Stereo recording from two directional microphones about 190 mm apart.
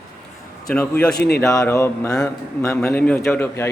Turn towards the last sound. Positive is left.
turn(degrees=10)  # may be behind; listen again after turning